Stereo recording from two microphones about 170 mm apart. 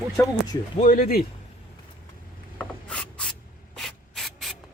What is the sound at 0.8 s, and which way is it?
Speech, 55° left (ahead or behind).